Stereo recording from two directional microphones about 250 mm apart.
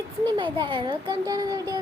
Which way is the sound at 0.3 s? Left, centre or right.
Centre.